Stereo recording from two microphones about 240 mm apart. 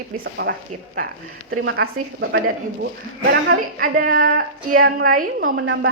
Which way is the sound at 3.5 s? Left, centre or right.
Right.